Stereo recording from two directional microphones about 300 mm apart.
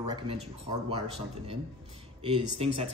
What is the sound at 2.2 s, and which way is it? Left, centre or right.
Speech, centre.